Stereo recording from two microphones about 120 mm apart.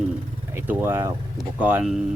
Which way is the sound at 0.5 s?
20° right (ahead or behind).